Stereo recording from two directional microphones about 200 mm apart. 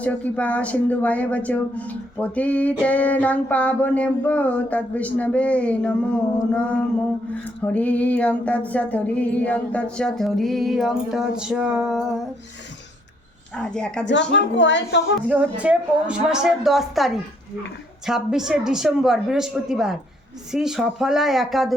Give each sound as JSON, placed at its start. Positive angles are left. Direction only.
{"t": 0.0, "sound": "speech", "side_deg": 5}
{"t": 7.4, "sound": "female singing", "side_deg": 5}
{"t": 13.5, "sound": "female singing", "side_deg": 5}
{"t": 14.1, "sound": "a woman's voice", "side_deg": 60}
{"t": 15.3, "sound": "female singing", "side_deg": -5}